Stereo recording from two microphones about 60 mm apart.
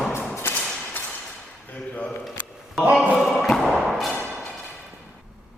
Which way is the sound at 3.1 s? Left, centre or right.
Centre.